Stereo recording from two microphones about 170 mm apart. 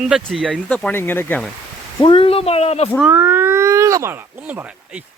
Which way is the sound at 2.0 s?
30° left (ahead or behind).